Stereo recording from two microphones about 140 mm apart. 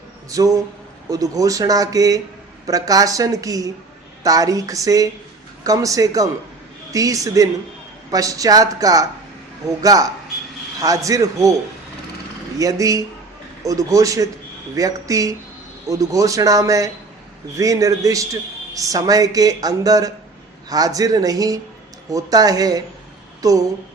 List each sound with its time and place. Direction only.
0.3 s a man's voice: 25° right (ahead or behind)
12.5 s a man's voice: 25° right (ahead or behind)